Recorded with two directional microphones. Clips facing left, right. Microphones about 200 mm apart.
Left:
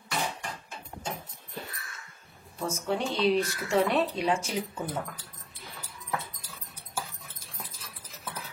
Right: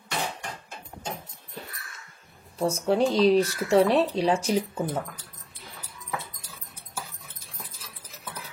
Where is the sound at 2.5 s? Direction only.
35° right (ahead or behind).